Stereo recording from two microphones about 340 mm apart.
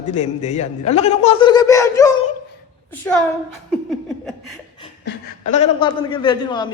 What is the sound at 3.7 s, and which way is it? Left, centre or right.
Laughter, centre.